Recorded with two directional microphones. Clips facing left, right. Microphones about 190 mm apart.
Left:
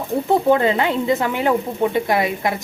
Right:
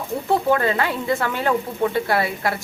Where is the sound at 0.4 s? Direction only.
20° left (ahead or behind).